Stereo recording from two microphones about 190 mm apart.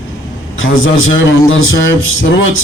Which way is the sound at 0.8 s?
90° left.